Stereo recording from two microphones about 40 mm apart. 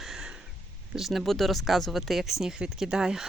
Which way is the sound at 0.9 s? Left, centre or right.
Centre.